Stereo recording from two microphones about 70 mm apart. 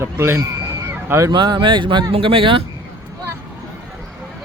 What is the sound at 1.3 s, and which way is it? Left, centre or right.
Speech, right.